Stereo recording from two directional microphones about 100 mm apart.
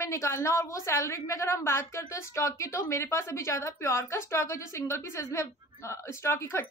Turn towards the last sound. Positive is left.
turn(degrees=25)  # may be behind; listen again after turning